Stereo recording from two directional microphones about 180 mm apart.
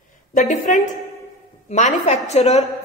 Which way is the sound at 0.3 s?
45° left (ahead or behind).